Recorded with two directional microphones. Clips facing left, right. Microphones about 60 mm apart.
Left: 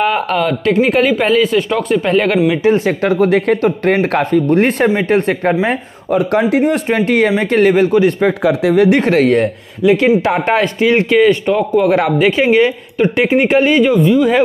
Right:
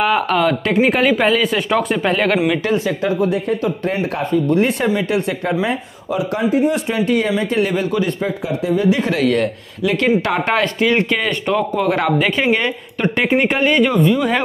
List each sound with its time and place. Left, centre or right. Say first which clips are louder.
0.0 s speech: left 1 dB; centre
2.7 s speech: left 4 dB; left
3.6 s speech: left 7 dB; left
4.9 s speech: left 5 dB; left
8.3 s speech: left 7 dB; left
9.8 s speech: left 5 dB; centre